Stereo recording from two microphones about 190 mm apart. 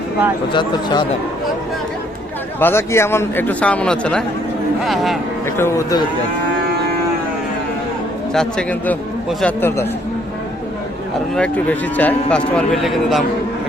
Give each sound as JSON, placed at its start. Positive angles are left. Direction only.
{"t": 0.5, "sound": "speech", "side_deg": 25}
{"t": 2.6, "sound": "a man's voice", "side_deg": 10}
{"t": 5.5, "sound": "a man's voice", "side_deg": 15}
{"t": 8.3, "sound": "a man's voice", "side_deg": 5}
{"t": 11.3, "sound": "speech", "side_deg": 5}